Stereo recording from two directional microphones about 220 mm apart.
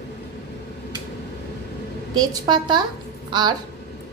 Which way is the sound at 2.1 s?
20° right (ahead or behind).